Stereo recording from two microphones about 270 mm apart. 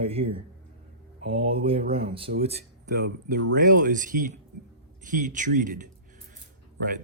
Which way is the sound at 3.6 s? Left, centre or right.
Right.